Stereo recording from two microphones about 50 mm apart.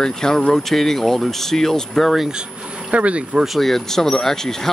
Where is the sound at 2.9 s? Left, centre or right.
Right.